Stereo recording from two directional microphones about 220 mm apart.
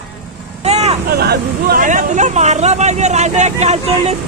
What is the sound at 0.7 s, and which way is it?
Vehicle, 30° right (ahead or behind).